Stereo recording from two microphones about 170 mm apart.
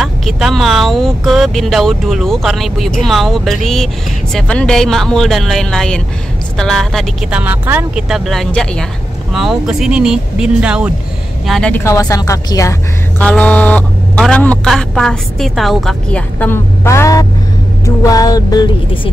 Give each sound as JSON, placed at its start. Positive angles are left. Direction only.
{"t": 0.0, "sound": "speech", "side_deg": 0}
{"t": 11.7, "sound": "a woman's voice", "side_deg": 15}
{"t": 13.2, "sound": "a woman's voice", "side_deg": 10}